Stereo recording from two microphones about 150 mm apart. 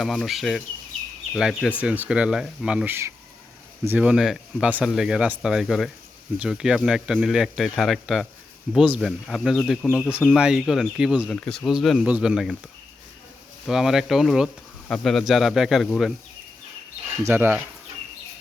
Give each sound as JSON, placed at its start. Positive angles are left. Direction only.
{"t": 0.0, "sound": "speech", "side_deg": 0}
{"t": 13.7, "sound": "speech", "side_deg": -5}
{"t": 17.2, "sound": "speech", "side_deg": -15}